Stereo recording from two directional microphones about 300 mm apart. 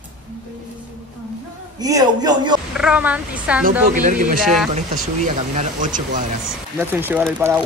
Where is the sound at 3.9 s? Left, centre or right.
Right.